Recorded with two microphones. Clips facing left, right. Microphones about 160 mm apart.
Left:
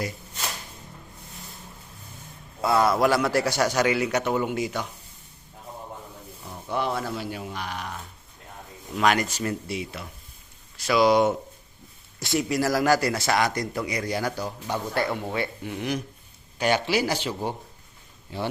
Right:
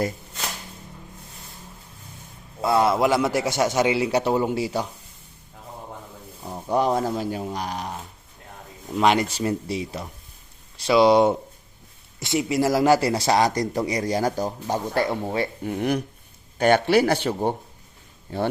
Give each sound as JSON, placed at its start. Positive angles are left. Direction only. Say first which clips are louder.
{"t": 2.6, "sound": "a man's voice", "louder": "right 1 dB", "side_deg": -25}
{"t": 6.4, "sound": "a man's voice", "louder": "right 6 dB", "side_deg": -40}
{"t": 15.6, "sound": "speech", "louder": "right 5 dB", "side_deg": -50}